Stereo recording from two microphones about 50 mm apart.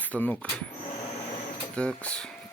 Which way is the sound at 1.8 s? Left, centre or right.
Left.